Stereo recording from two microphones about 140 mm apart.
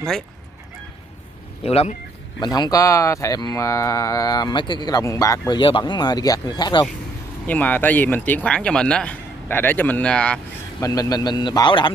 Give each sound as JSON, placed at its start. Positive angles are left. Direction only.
{"t": 1.6, "sound": "speech", "side_deg": 45}
{"t": 2.4, "sound": "speech", "side_deg": 30}
{"t": 5.6, "sound": "speech", "side_deg": 35}
{"t": 7.4, "sound": "speech", "side_deg": 10}
{"t": 10.8, "sound": "speech", "side_deg": 25}